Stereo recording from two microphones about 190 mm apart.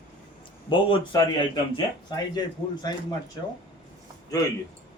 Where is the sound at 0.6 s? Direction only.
25° left (ahead or behind).